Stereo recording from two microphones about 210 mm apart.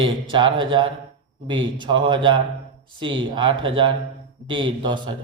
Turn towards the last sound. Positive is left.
turn(degrees=-20)  # may be behind; listen again after turning